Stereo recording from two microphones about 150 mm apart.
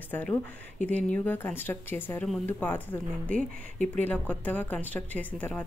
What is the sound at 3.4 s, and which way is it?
Speech, 55° right (ahead or behind).